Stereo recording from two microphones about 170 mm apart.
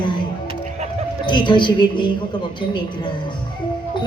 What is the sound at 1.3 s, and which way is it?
Speech, 25° left (ahead or behind).